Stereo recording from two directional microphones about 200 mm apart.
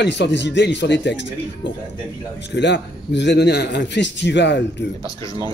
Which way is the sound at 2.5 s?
60° left (ahead or behind).